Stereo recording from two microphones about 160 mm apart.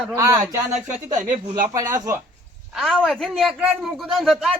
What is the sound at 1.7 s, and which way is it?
Speech, 25° right (ahead or behind).